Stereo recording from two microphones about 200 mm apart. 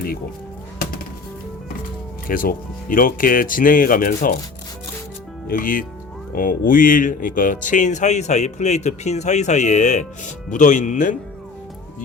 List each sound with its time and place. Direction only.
2.2 s speech: 45° left (ahead or behind)
5.5 s speech: 45° left (ahead or behind)